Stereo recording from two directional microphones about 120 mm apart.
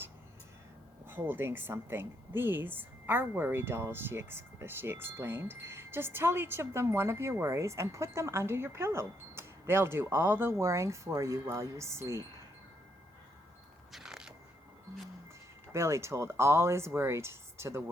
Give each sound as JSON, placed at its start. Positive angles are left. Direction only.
{"t": 1.0, "sound": "a woman's voice", "side_deg": -20}
{"t": 13.9, "sound": "a sound", "side_deg": -5}
{"t": 15.7, "sound": "a woman's voice", "side_deg": -25}